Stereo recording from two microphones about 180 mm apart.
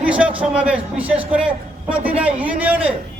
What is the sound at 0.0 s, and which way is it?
A man's voice, 5° right (ahead or behind).